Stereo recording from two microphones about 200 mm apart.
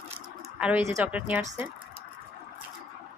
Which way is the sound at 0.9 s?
10° right (ahead or behind).